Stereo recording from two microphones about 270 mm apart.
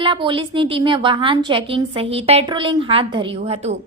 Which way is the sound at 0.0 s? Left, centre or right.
Centre.